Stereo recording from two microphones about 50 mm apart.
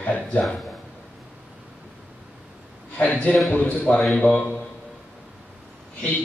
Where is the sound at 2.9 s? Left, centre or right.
Left.